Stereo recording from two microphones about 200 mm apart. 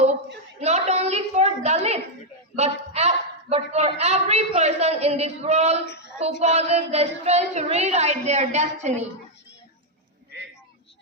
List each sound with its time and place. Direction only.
0.6 s a sound: 35° right (ahead or behind)
2.6 s a woman's voice: 35° right (ahead or behind)
5.8 s a woman's voice: 55° left (ahead or behind)
6.4 s a woman's voice: 35° right (ahead or behind)